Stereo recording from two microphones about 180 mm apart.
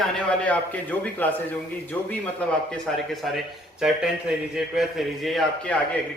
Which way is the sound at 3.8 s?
5° right (ahead or behind).